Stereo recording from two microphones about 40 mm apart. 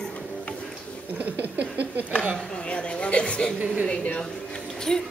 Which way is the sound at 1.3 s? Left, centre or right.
Right.